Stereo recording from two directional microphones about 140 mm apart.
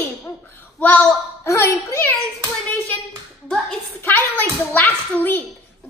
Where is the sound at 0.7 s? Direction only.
10° left (ahead or behind).